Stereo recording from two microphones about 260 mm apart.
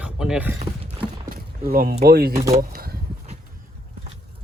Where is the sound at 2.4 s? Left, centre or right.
Right.